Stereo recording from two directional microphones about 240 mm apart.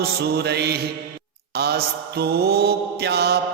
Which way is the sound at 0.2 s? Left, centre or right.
Right.